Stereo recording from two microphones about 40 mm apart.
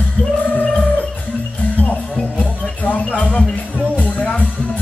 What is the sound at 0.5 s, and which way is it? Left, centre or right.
Music, left.